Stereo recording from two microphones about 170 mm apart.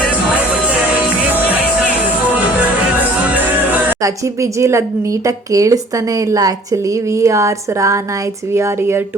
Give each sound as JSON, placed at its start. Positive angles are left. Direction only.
{"t": 3.7, "sound": "a woman's voice", "side_deg": -15}